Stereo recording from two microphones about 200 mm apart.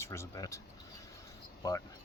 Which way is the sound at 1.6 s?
15° left (ahead or behind).